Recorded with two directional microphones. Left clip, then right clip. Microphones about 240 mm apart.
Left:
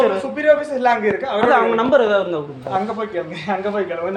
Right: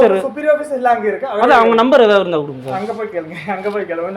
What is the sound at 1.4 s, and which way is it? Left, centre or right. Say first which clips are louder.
Speech: right 5 dB; right.